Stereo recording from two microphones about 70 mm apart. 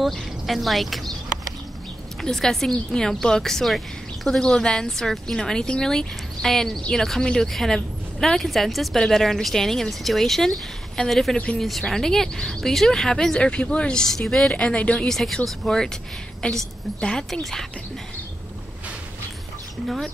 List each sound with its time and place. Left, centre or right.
0.0 s speech: centre
2.2 s speech: centre
4.4 s speech: centre
11.3 s speech: centre
11.6 s speech: centre
14.5 s speech: centre